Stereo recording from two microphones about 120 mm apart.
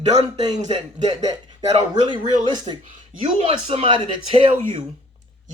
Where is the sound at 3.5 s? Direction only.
50° right (ahead or behind).